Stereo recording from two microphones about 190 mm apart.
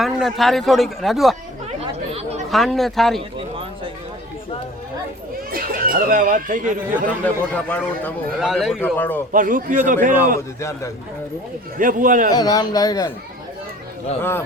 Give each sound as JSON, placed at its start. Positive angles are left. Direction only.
{"t": 0.0, "sound": "speech", "side_deg": 0}
{"t": 2.5, "sound": "speech", "side_deg": 0}
{"t": 3.2, "sound": "a sound", "side_deg": -30}
{"t": 5.5, "sound": "speech", "side_deg": -50}
{"t": 7.5, "sound": "a man's voice", "side_deg": 10}
{"t": 8.4, "sound": "speech", "side_deg": 0}
{"t": 9.0, "sound": "a man's voice", "side_deg": 10}
{"t": 9.3, "sound": "a man's voice", "side_deg": -45}
{"t": 10.6, "sound": "a man's voice", "side_deg": 15}
{"t": 11.8, "sound": "a man's voice", "side_deg": -45}
{"t": 12.3, "sound": "speech", "side_deg": 20}
{"t": 14.2, "sound": "a man's voice", "side_deg": 10}